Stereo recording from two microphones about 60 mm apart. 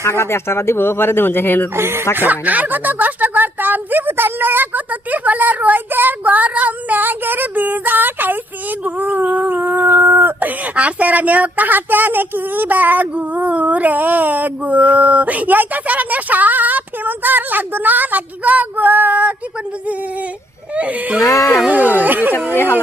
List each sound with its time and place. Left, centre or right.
0.0 s speech: left
1.7 s speech: right
2.1 s speech: right
20.7 s speech: right
21.2 s music: left
21.7 s speech: right